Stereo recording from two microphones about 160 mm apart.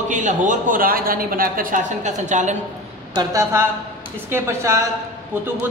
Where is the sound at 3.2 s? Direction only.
20° right (ahead or behind).